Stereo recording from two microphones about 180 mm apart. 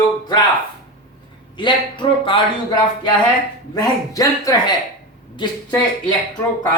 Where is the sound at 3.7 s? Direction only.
20° left (ahead or behind).